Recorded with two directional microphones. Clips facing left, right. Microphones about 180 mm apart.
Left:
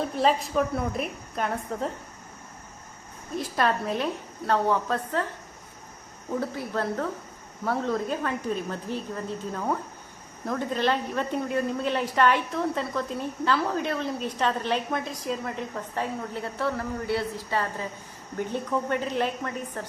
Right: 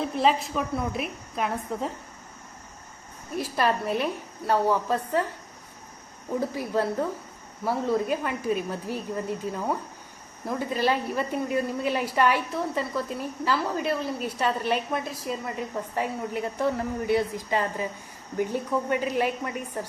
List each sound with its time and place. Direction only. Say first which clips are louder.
0.0 s a woman's voice: even; centre (ahead or behind)
3.3 s speech: even; 10° right (ahead or behind)
6.4 s a woman's voice: right 4 dB; 15° right (ahead or behind)